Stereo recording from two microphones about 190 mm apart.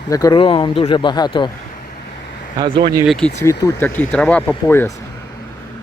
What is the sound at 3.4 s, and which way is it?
Speech, 15° left (ahead or behind).